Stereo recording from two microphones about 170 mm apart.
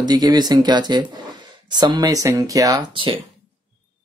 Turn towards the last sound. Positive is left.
turn(degrees=-30)  # may be behind; listen again after turning